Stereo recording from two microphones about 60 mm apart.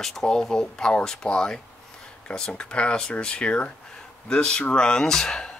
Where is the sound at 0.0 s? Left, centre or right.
Centre.